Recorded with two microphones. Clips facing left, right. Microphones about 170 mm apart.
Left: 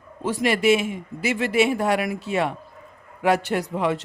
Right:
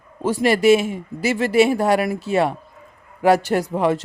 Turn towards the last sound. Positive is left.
turn(degrees=-40)  # may be behind; listen again after turning